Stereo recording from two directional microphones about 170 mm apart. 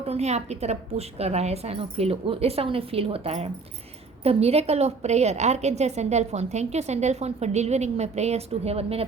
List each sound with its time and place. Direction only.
0.1 s a woman's voice: 40° right (ahead or behind)